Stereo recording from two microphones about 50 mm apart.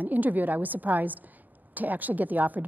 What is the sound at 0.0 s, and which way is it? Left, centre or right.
A woman's voice, right.